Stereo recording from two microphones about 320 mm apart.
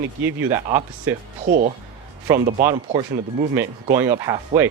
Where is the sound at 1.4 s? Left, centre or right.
Right.